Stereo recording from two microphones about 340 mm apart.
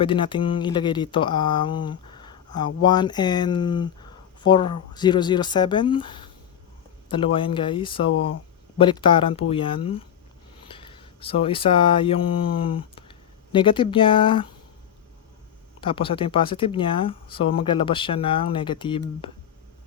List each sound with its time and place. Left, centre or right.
0.0 s speech: centre
7.3 s speech: centre
15.8 s speech: centre